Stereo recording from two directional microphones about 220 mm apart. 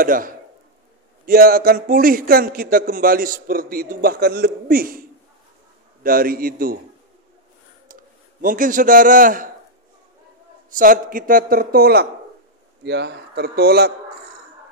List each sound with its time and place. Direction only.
0.0 s a man's voice: 40° right (ahead or behind)
6.0 s a man's voice: 40° right (ahead or behind)
7.9 s a man's voice: 35° right (ahead or behind)
10.7 s a man's voice: 40° right (ahead or behind)